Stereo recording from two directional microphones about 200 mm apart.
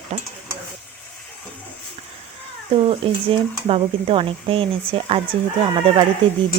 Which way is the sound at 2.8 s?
25° right (ahead or behind).